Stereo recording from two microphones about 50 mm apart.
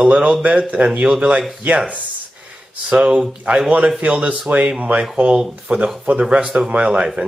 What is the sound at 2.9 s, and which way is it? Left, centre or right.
Speech, right.